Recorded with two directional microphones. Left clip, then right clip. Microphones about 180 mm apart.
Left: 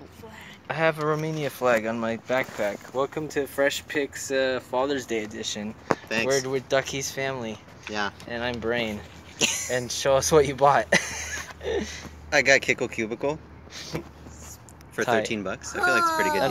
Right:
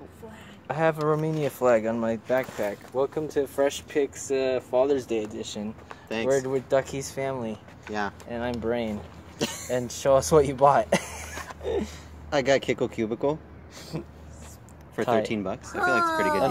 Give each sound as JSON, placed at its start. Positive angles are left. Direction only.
{"t": 0.7, "sound": "speech", "side_deg": -15}
{"t": 0.9, "sound": "speech", "side_deg": -5}
{"t": 1.2, "sound": "speech", "side_deg": -25}
{"t": 2.6, "sound": "speech", "side_deg": 10}
{"t": 7.8, "sound": "speech", "side_deg": -15}
{"t": 8.3, "sound": "speech", "side_deg": -5}
{"t": 9.4, "sound": "speech", "side_deg": -30}
{"t": 9.8, "sound": "speech", "side_deg": -10}
{"t": 12.3, "sound": "speech", "side_deg": -30}
{"t": 15.2, "sound": "speech", "side_deg": -35}